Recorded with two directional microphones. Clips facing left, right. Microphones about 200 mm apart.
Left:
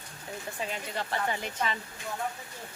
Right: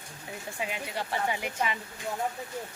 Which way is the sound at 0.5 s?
10° right (ahead or behind).